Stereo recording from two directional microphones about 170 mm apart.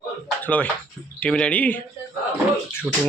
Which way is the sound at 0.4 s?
10° left (ahead or behind).